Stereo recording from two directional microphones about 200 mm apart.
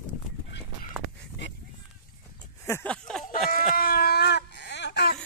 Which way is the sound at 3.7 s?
50° left (ahead or behind).